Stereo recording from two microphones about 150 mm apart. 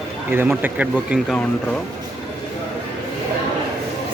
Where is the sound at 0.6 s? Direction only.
10° right (ahead or behind).